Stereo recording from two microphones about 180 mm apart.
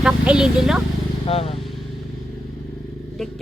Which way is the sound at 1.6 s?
Centre (ahead or behind).